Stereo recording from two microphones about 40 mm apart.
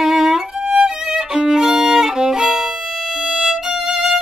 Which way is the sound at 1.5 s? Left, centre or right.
Centre.